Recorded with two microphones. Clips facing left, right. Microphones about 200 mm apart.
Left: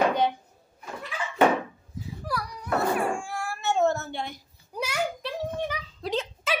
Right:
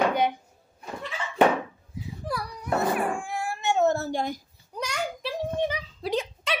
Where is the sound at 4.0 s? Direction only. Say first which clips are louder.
Right 6 dB; 40° right (ahead or behind).